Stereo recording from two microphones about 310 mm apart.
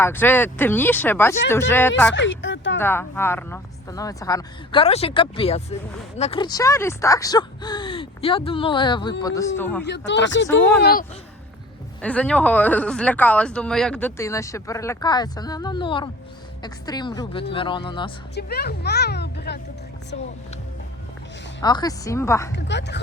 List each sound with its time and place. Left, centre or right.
0.0 s speech: centre
2.1 s speech: left
2.7 s speech: centre
9.8 s speech: left
12.0 s speech: centre
18.3 s speech: left
21.6 s speech: centre
22.5 s speech: left